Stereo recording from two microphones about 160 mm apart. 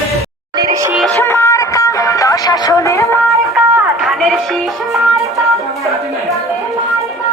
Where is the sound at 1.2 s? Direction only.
15° left (ahead or behind).